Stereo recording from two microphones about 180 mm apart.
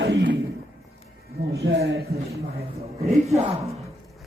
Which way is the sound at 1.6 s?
70° right (ahead or behind).